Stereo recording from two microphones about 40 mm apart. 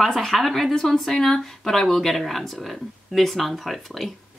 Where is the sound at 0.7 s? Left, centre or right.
Centre.